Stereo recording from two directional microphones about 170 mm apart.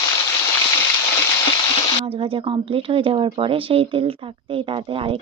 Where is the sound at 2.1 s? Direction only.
35° right (ahead or behind).